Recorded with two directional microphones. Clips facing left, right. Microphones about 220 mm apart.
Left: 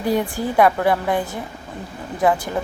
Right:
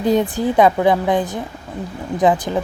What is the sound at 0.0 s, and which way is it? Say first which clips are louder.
Speech: right 4 dB; 20° right (ahead or behind).